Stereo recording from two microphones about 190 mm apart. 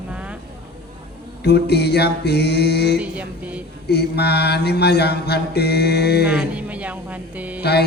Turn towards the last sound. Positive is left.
turn(degrees=60)  # may be behind; listen again after turning